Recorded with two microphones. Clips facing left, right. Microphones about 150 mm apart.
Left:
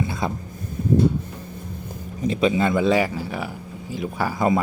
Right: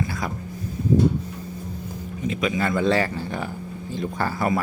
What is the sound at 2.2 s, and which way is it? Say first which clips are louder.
Speech: left 4 dB; 30° left (ahead or behind).